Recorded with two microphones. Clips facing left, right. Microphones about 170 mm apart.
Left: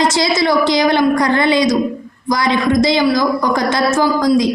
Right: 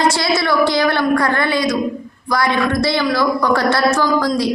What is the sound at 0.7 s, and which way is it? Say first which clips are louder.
A woman's voice: left 3 dB; 20° left (ahead or behind).